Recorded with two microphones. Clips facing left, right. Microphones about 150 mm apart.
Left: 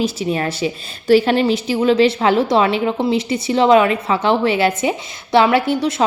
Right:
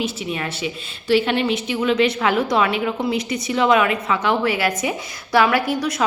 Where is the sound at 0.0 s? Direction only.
35° left (ahead or behind).